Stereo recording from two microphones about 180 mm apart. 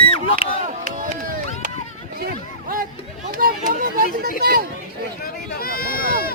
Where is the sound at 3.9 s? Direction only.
55° right (ahead or behind).